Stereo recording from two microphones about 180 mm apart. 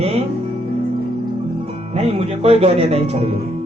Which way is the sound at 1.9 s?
35° right (ahead or behind).